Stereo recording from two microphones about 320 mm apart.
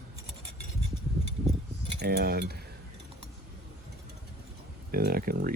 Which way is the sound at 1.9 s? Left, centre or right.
Right.